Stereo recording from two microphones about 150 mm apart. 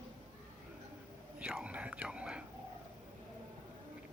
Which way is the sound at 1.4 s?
5° right (ahead or behind).